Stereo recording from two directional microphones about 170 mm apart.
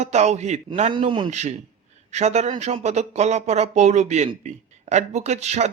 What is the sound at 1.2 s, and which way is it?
Speech, 40° right (ahead or behind).